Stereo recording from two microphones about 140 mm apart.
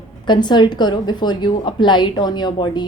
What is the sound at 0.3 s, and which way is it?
A woman's voice, 30° left (ahead or behind).